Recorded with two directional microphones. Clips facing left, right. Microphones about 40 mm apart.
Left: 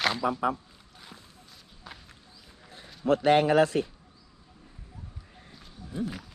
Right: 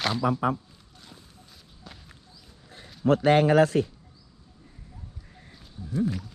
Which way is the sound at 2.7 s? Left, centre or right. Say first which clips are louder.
Right 2 dB; right.